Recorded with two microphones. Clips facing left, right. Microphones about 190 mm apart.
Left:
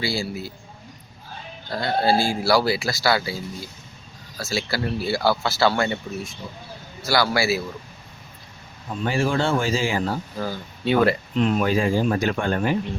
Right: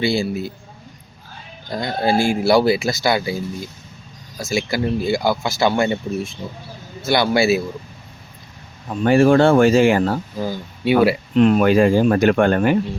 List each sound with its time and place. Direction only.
0.0 s speech: 20° right (ahead or behind)
1.7 s speech: 15° right (ahead or behind)
9.0 s speech: 60° right (ahead or behind)
10.3 s speech: 15° right (ahead or behind)
11.3 s speech: 65° right (ahead or behind)